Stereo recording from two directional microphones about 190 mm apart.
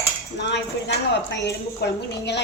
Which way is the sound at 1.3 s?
65° left (ahead or behind).